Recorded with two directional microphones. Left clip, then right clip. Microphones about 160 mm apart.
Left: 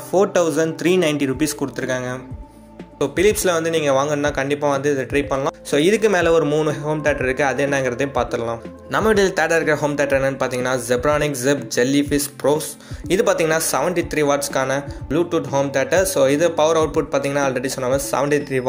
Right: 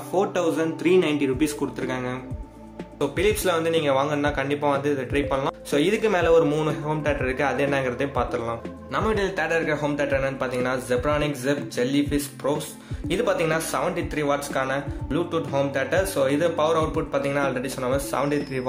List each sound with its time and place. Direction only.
0.1 s speech: 30° left (ahead or behind)
8.9 s speech: 40° left (ahead or behind)